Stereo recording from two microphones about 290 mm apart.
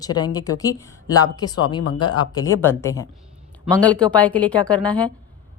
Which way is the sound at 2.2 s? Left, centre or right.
Centre.